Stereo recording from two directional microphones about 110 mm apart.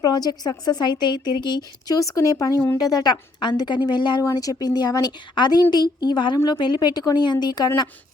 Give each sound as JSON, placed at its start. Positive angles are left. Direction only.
{"t": 0.0, "sound": "speech", "side_deg": 35}
{"t": 4.2, "sound": "speech", "side_deg": 30}